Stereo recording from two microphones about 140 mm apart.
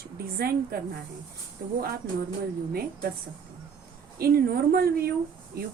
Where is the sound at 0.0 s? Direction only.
90° right.